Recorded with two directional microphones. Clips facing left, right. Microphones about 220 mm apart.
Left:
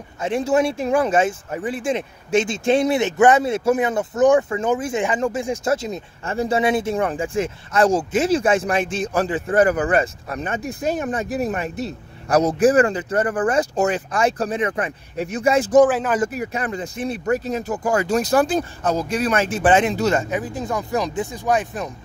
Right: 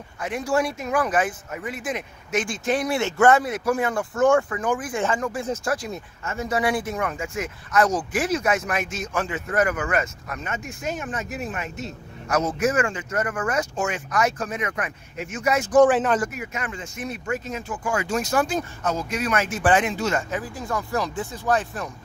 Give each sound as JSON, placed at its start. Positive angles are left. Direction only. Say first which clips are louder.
{"t": 0.2, "sound": "speech", "louder": "left 5 dB", "side_deg": 25}
{"t": 6.2, "sound": "speech", "louder": "left 5 dB", "side_deg": 30}
{"t": 15.8, "sound": "speech", "louder": "right 2 dB", "side_deg": 5}
{"t": 16.2, "sound": "speech", "louder": "left 6 dB", "side_deg": 35}
{"t": 20.2, "sound": "speech", "louder": "left 5 dB", "side_deg": 20}